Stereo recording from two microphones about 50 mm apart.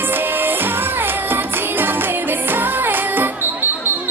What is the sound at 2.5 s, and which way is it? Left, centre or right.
Music, right.